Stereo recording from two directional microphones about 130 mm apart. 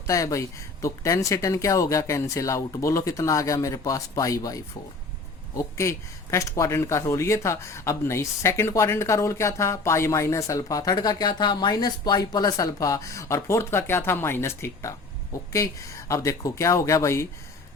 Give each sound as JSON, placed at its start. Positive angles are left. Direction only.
{"t": 0.1, "sound": "speech", "side_deg": 25}